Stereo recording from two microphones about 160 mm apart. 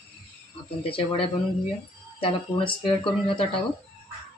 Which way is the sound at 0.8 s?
35° left (ahead or behind).